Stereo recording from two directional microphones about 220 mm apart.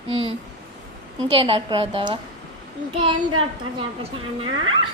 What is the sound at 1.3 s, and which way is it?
Speech, 25° right (ahead or behind).